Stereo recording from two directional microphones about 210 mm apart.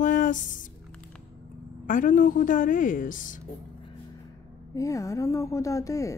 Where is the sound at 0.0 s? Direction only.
35° left (ahead or behind).